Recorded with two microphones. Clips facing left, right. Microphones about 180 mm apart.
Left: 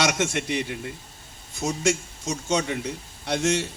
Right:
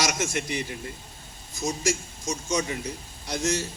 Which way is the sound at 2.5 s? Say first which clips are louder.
Left 3 dB; 70° left (ahead or behind).